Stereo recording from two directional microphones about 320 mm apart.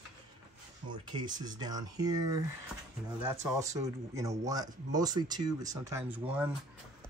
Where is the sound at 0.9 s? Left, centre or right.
Centre.